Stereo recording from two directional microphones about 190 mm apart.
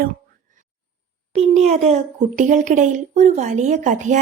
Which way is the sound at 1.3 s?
35° right (ahead or behind).